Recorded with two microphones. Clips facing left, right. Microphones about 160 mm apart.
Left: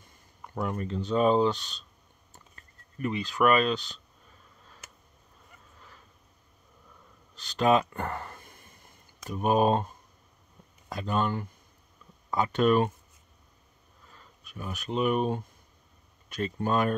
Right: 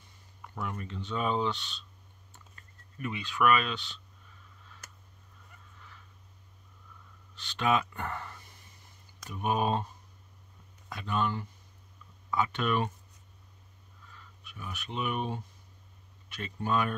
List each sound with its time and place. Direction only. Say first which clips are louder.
0.6 s speech: left 7 dB; 40° left (ahead or behind)
3.0 s speech: left 4 dB; 40° left (ahead or behind)
7.3 s a sound: left 5 dB; 40° left (ahead or behind)
9.3 s speech: left 6 dB; 40° left (ahead or behind)
14.1 s speech: left 6 dB; 40° left (ahead or behind)